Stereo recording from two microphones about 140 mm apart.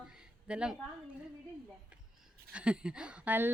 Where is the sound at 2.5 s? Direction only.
5° right (ahead or behind).